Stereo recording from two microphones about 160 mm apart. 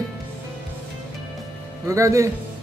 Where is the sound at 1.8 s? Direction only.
20° right (ahead or behind).